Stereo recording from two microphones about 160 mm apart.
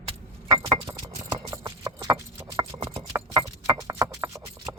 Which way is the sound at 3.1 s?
20° right (ahead or behind).